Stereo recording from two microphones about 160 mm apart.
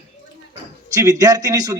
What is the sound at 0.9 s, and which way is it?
Speech, 20° right (ahead or behind).